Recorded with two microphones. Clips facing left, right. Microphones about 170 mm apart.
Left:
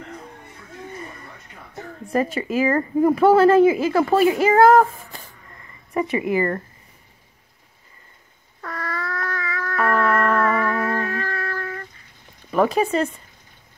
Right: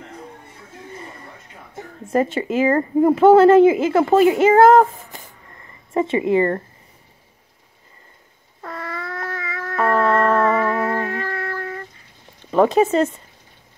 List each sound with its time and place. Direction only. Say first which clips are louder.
2.0 s a woman's voice: right 3 dB; 25° right (ahead or behind)
8.5 s cat: even; 25° right (ahead or behind)
12.4 s speech: right 4 dB; 25° right (ahead or behind)